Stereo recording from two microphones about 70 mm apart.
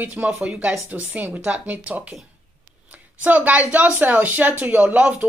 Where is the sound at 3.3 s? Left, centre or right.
Right.